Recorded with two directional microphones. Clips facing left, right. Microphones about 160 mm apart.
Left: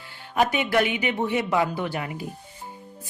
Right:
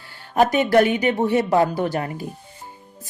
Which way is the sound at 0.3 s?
40° right (ahead or behind).